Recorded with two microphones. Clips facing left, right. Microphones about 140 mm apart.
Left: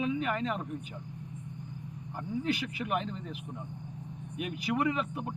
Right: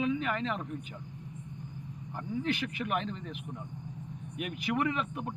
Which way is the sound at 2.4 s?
10° left (ahead or behind).